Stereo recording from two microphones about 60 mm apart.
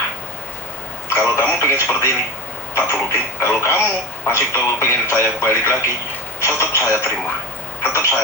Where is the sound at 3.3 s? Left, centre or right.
Left.